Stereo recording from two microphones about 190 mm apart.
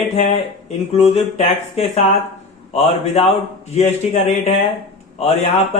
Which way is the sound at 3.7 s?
35° left (ahead or behind).